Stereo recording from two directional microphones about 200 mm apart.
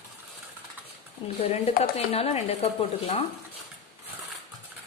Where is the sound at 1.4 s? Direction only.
30° left (ahead or behind).